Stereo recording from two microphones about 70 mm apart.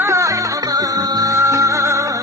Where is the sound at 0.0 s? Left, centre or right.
Right.